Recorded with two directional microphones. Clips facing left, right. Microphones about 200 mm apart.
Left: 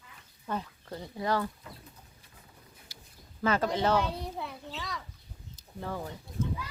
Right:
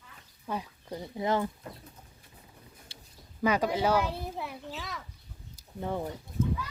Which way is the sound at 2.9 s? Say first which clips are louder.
Right 1 dB; 30° right (ahead or behind).